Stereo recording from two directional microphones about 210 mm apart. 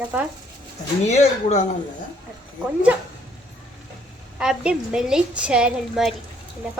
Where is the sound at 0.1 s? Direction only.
5° right (ahead or behind).